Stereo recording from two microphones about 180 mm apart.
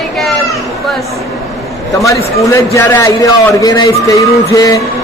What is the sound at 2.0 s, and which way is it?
A man's voice, 15° left (ahead or behind).